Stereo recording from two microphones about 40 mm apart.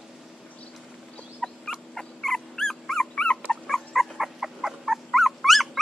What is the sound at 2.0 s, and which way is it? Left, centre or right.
Dog, centre.